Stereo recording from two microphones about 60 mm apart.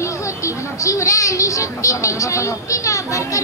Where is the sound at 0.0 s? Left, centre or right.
Left.